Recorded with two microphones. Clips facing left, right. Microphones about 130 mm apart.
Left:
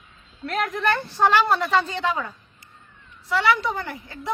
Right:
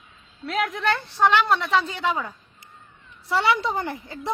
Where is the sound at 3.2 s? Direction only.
30° right (ahead or behind).